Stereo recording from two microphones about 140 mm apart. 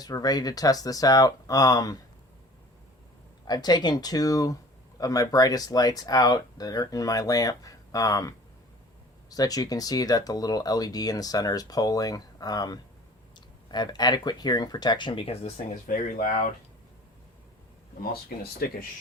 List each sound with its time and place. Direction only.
0.0 s speech: 25° left (ahead or behind)
3.4 s speech: 30° left (ahead or behind)
9.3 s speech: 25° left (ahead or behind); by 15.6 s 45° left (ahead or behind)
15.9 s speech: 80° left
18.3 s speech: 90° left